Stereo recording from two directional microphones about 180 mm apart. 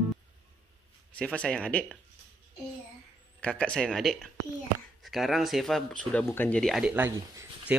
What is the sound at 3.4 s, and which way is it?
Speech, 5° left (ahead or behind).